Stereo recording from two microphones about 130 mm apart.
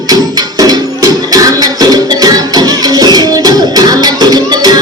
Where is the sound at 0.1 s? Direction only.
30° right (ahead or behind).